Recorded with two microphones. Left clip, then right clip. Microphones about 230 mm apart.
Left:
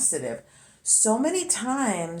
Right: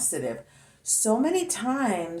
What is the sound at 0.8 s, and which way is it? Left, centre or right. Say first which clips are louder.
Speech: left 1 dB; centre.